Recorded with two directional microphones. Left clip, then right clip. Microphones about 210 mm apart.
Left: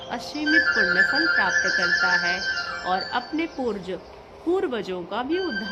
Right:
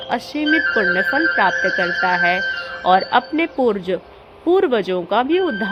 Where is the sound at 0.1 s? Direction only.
15° right (ahead or behind).